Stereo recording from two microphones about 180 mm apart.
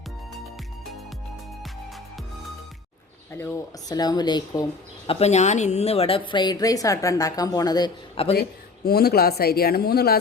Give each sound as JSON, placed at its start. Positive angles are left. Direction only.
{"t": 3.3, "sound": "a woman's voice", "side_deg": 15}
{"t": 5.0, "sound": "a woman's voice", "side_deg": 40}
{"t": 8.4, "sound": "speech", "side_deg": 60}